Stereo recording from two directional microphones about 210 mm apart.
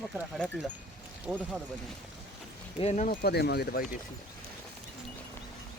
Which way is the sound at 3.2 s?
50° left (ahead or behind).